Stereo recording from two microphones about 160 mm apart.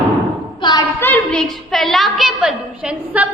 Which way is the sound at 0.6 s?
25° left (ahead or behind).